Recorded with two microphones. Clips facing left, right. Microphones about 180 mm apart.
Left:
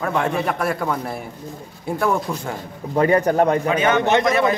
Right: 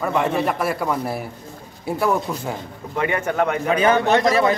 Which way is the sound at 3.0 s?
35° left (ahead or behind).